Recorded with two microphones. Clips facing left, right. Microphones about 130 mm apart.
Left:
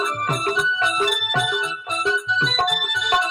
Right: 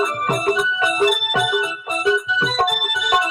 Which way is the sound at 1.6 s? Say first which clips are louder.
Right 4 dB; 10° right (ahead or behind).